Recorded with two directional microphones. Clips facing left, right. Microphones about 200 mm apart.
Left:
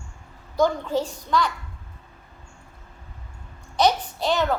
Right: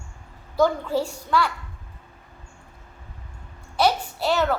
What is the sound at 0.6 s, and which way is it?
Speech, 10° right (ahead or behind).